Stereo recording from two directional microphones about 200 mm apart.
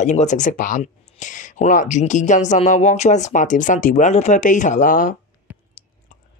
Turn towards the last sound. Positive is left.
turn(degrees=40)  # may be behind; listen again after turning